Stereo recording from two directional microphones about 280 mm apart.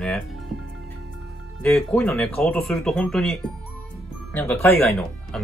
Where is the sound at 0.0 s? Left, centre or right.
Centre.